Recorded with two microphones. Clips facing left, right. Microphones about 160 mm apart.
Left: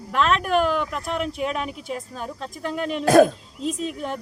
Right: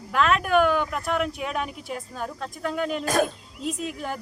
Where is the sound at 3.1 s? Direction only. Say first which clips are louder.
Left 11 dB; 50° left (ahead or behind).